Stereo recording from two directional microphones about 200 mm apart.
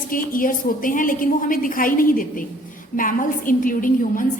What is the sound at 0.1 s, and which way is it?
A woman's voice, 45° left (ahead or behind).